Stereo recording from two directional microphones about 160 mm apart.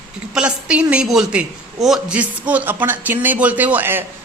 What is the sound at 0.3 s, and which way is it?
A woman's voice, 5° right (ahead or behind).